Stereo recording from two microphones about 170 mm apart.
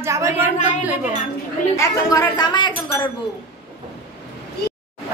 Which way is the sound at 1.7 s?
20° left (ahead or behind).